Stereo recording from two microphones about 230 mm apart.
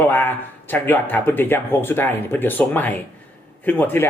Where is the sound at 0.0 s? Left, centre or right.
Centre.